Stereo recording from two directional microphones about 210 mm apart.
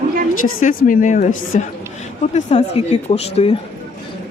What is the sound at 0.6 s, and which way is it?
A woman's voice, 40° left (ahead or behind).